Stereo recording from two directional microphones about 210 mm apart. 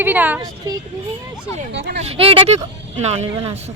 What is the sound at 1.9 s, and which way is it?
Speech, 30° right (ahead or behind).